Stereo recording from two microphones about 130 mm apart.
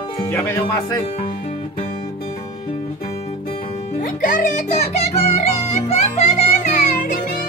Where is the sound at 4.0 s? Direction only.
90° left; by 5.1 s 65° left (ahead or behind).